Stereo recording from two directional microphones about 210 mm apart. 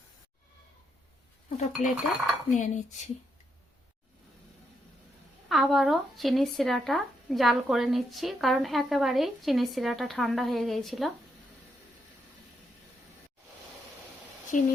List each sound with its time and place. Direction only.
1.5 s speech: 35° left (ahead or behind)
5.5 s speech: centre (ahead or behind)
14.5 s speech: 35° left (ahead or behind)